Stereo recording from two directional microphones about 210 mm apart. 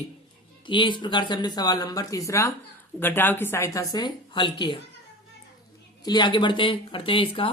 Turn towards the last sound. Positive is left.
turn(degrees=25)  # may be behind; listen again after turning